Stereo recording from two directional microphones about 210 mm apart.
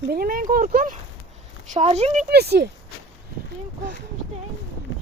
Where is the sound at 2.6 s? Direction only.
50° right (ahead or behind).